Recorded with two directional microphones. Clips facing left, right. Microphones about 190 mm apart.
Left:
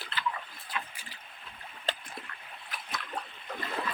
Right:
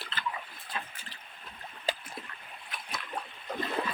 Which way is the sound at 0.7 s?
35° right (ahead or behind).